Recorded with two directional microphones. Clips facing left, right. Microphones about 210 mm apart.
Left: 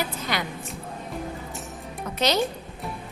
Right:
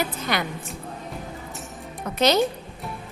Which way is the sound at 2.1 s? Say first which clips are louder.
Right 4 dB; 50° right (ahead or behind).